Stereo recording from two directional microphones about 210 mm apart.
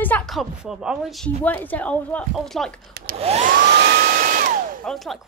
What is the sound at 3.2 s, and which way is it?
Hair dryer, 30° right (ahead or behind).